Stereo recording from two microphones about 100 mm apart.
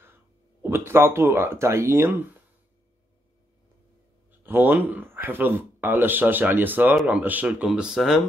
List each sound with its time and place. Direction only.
0.6 s speech: 25° right (ahead or behind)
4.3 s a man's voice: 20° right (ahead or behind)